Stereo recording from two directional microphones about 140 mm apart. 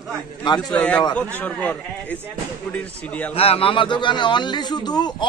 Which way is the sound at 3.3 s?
45° left (ahead or behind).